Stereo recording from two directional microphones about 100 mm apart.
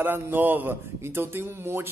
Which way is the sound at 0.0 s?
20° right (ahead or behind).